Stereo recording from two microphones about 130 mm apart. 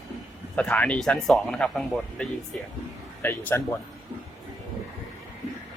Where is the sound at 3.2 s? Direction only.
15° left (ahead or behind).